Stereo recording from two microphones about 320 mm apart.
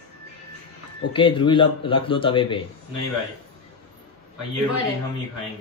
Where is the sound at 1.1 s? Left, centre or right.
Centre.